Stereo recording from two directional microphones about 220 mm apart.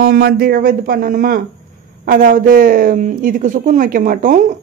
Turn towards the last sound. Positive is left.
turn(degrees=-35)  # may be behind; listen again after turning